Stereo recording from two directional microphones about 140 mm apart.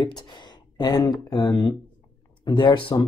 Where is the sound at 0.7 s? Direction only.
30° left (ahead or behind).